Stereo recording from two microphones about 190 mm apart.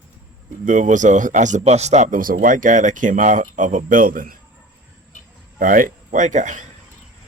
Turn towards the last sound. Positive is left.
turn(degrees=-40)  # may be behind; listen again after turning